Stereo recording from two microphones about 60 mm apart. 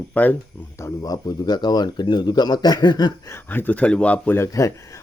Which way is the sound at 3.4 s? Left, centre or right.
Left.